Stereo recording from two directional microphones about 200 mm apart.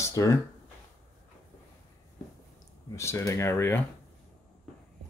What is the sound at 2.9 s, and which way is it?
Speech, 15° left (ahead or behind).